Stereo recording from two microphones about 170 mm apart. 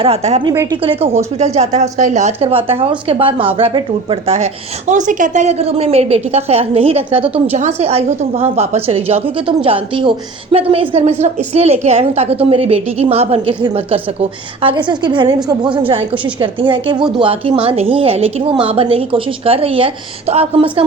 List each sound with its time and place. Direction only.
0.0 s a woman's voice: 35° right (ahead or behind)
0.4 s a woman's voice: 20° right (ahead or behind)
0.8 s a woman's voice: 35° right (ahead or behind)